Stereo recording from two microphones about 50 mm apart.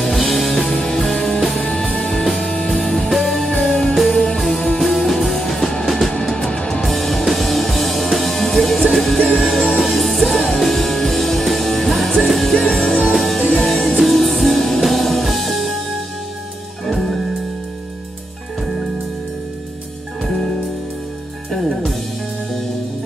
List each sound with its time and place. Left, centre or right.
0.0 s music: centre
1.6 s music: centre
6.5 s music: centre
6.8 s music: centre
13.4 s music: left
13.7 s music: centre
16.8 s music: centre
20.2 s music: centre
21.5 s music: centre